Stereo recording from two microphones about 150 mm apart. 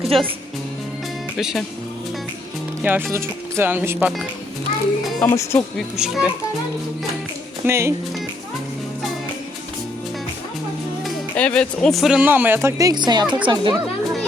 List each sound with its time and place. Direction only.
0.1 s speech: centre (ahead or behind)
1.4 s speech: 5° right (ahead or behind)
2.8 s speech: 10° right (ahead or behind)
5.2 s speech: 20° left (ahead or behind)
5.7 s speech: centre (ahead or behind)
7.6 s speech: 15° right (ahead or behind)
11.0 s speech: 5° left (ahead or behind); by 13.7 s 30° right (ahead or behind)